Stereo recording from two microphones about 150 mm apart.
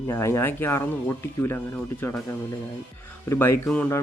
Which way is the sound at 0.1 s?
20° left (ahead or behind).